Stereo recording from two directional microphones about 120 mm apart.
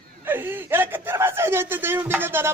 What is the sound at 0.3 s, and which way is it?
Speech, 15° right (ahead or behind).